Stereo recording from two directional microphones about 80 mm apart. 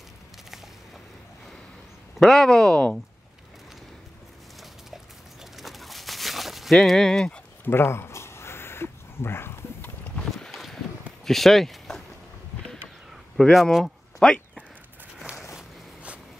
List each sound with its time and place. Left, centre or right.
2.1 s speech: centre
4.9 s dog: centre
7.6 s crow: left
10.3 s boat: centre
11.2 s speech: centre
13.4 s speech: centre
14.2 s speech: centre
15.5 s walk: centre